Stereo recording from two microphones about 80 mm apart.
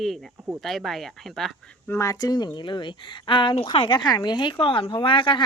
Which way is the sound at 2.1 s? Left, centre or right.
Left.